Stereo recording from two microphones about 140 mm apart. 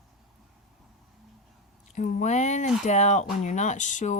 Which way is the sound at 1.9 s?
60° left (ahead or behind).